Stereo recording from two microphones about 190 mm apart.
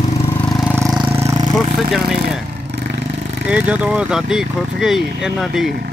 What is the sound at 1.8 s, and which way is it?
Speech, centre (ahead or behind).